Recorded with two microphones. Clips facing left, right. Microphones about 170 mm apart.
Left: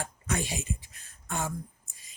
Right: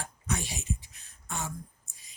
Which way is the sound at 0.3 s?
50° left (ahead or behind).